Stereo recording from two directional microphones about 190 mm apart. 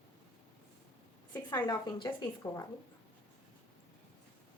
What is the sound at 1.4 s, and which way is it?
A woman's voice, 20° left (ahead or behind).